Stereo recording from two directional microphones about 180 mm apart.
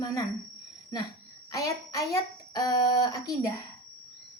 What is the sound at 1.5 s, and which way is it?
A woman's voice, 20° left (ahead or behind).